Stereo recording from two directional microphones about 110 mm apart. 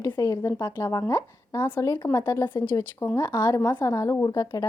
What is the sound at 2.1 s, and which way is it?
Speech, 25° left (ahead or behind).